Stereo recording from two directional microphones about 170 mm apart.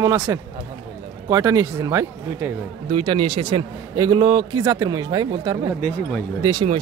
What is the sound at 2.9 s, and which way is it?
A man's voice, 30° right (ahead or behind).